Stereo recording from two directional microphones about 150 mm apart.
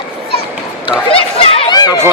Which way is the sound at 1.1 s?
40° left (ahead or behind).